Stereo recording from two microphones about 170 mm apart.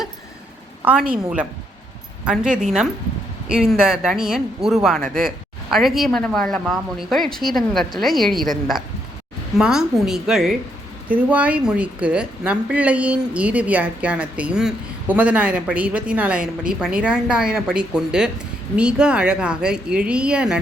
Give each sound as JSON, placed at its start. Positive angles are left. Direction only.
{"t": 0.9, "sound": "a woman's voice", "side_deg": -5}
{"t": 4.9, "sound": "speech", "side_deg": -55}
{"t": 5.7, "sound": "speech", "side_deg": 0}
{"t": 9.6, "sound": "a woman's voice", "side_deg": -5}